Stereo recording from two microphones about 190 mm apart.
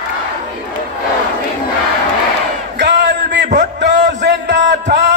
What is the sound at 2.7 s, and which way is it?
Battle cry, 65° right (ahead or behind).